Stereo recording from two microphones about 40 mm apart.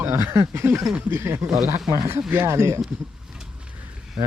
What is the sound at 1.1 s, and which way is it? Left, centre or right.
Speech, right.